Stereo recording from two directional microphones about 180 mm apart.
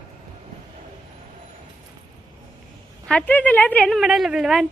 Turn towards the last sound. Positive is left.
turn(degrees=0)  # may be behind; listen again after turning